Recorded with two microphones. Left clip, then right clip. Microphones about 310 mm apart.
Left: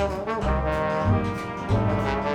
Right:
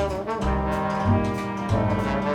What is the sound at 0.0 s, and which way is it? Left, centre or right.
Brass instrument, centre.